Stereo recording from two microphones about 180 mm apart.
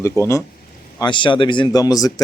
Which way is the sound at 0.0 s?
15° left (ahead or behind).